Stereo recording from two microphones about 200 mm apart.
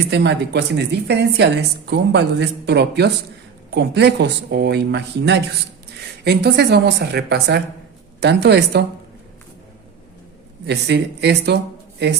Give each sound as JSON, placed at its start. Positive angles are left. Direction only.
{"t": 0.1, "sound": "speech", "side_deg": -55}
{"t": 10.7, "sound": "speech", "side_deg": -55}